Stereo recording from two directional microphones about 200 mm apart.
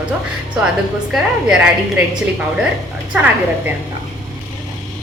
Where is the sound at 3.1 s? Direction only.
10° right (ahead or behind).